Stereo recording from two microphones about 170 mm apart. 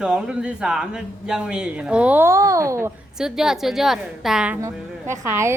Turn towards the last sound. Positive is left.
turn(degrees=-15)  # may be behind; listen again after turning